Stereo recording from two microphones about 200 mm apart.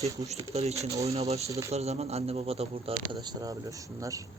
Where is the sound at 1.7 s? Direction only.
30° right (ahead or behind).